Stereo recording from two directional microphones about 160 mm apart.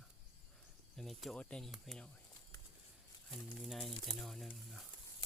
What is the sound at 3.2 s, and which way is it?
Speech, centre (ahead or behind).